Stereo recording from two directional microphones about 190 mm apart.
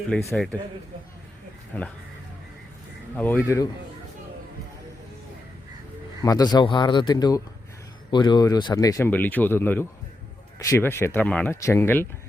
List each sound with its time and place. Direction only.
0.1 s speech: 5° left (ahead or behind)
3.2 s speech: 10° left (ahead or behind)
6.2 s speech: 20° left (ahead or behind)